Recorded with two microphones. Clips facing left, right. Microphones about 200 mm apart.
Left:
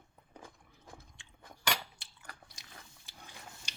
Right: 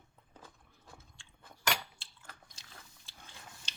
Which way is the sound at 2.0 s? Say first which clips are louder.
Left 2 dB; 15° left (ahead or behind).